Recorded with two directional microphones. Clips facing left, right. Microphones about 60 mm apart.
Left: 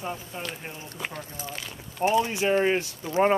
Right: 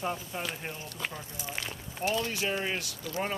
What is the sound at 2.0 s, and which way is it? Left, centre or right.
Speech, left.